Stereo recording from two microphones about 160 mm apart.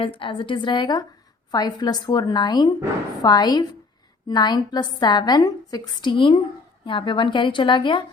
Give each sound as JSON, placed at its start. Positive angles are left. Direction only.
{"t": 0.0, "sound": "a woman's voice", "side_deg": 35}